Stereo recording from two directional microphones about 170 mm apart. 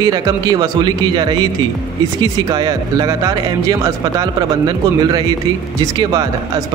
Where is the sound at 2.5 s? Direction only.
25° right (ahead or behind).